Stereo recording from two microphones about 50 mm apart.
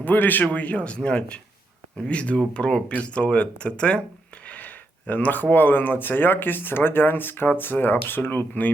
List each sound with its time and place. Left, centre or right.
0.0 s speech: left
0.4 s speech: left
4.4 s speech: left